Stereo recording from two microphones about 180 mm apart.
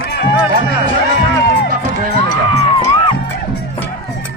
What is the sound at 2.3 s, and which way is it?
Music, 40° left (ahead or behind).